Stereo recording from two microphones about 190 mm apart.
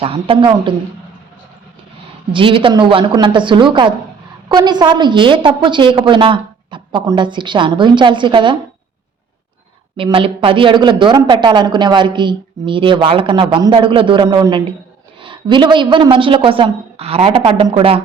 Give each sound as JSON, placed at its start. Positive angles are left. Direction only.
{"t": 0.0, "sound": "speech", "side_deg": -30}
{"t": 2.3, "sound": "speech", "side_deg": -25}
{"t": 10.0, "sound": "speech", "side_deg": -30}